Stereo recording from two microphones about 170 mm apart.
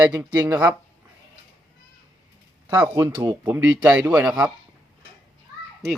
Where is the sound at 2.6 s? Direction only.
10° right (ahead or behind).